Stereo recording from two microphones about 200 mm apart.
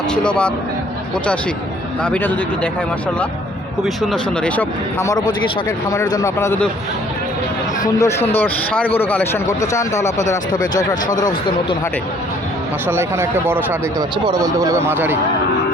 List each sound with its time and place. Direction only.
0.1 s speech: 5° left (ahead or behind)
2.0 s speech: 5° left (ahead or behind)
3.8 s speech: centre (ahead or behind)
7.9 s speech: 15° left (ahead or behind)
12.9 s speech: 10° right (ahead or behind)